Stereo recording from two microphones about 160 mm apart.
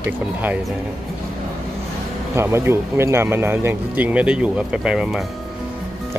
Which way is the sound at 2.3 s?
15° right (ahead or behind).